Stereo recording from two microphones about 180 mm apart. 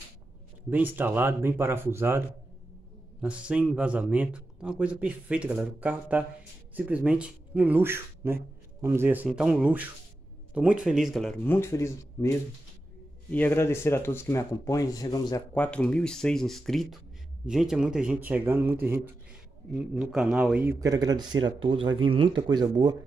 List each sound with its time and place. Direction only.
0.7 s a man's voice: 10° right (ahead or behind); by 12.3 s 15° left (ahead or behind)
13.3 s speech: 10° left (ahead or behind)
15.5 s a man's voice: 5° left (ahead or behind)
20.8 s speech: 20° right (ahead or behind)